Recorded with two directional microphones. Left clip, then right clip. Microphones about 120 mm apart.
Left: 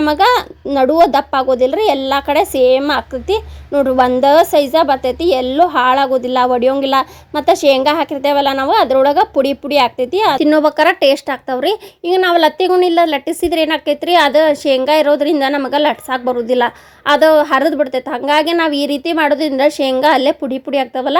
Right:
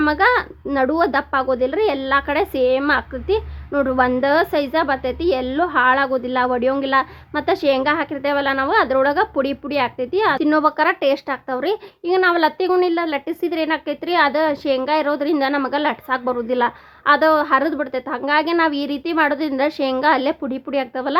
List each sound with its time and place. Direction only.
0.0 s speech: 30° left (ahead or behind)